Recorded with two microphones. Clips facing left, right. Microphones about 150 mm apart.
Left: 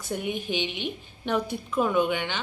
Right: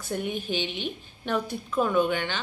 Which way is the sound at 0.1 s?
15° left (ahead or behind).